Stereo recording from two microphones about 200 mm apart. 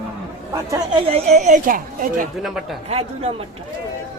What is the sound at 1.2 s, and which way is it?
A woman's voice, 35° right (ahead or behind).